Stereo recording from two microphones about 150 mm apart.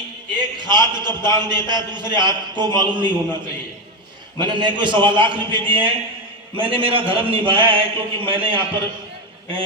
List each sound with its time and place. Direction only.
0.3 s a man's voice: 30° right (ahead or behind)
4.4 s a man's voice: 30° right (ahead or behind)